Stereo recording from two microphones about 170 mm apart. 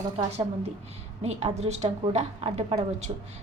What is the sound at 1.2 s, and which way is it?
A woman's voice, 40° right (ahead or behind).